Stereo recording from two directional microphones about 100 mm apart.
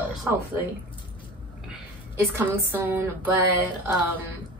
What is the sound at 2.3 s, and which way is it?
Speech, 20° right (ahead or behind).